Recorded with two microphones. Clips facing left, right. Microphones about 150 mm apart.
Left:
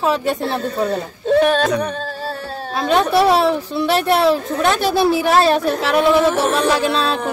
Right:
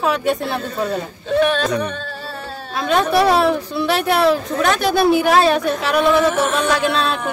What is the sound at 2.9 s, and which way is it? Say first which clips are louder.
Speech: left 1 dB; centre (ahead or behind).